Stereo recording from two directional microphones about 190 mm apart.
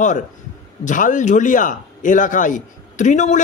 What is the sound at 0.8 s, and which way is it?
A man's voice, 40° left (ahead or behind).